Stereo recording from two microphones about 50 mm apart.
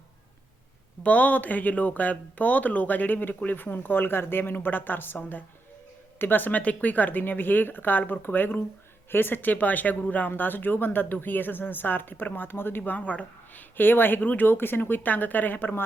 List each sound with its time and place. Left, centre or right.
1.0 s speech: left